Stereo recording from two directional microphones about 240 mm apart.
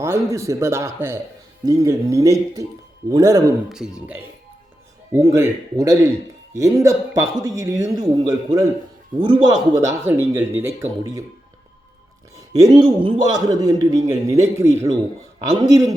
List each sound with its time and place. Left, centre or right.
0.0 s a man's voice: centre
3.7 s a man's voice: centre
12.5 s a man's voice: centre